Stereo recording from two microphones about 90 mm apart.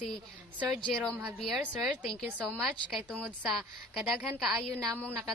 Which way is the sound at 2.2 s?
15° right (ahead or behind).